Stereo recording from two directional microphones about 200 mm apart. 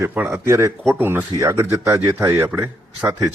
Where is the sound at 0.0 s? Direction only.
10° right (ahead or behind).